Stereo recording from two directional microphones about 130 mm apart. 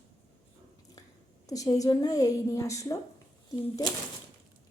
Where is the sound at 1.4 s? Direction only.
25° left (ahead or behind).